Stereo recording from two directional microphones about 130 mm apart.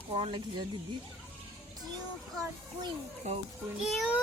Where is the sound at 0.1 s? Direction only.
40° right (ahead or behind).